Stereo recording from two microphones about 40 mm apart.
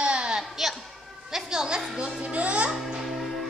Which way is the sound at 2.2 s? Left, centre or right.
Right.